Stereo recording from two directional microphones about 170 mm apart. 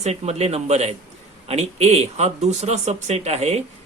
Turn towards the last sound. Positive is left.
turn(degrees=-40)  # may be behind; listen again after turning